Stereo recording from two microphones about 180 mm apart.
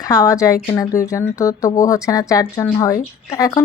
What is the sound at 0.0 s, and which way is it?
Speech, 20° left (ahead or behind).